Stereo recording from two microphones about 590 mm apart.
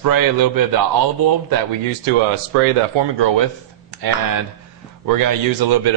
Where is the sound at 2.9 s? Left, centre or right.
Right.